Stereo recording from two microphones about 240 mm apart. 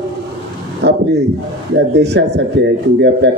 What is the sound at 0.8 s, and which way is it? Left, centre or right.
A man's voice, right.